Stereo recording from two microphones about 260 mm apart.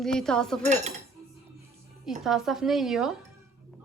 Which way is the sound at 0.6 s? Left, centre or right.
Right.